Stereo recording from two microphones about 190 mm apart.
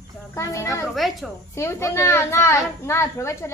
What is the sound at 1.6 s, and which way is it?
A woman's voice, 15° left (ahead or behind).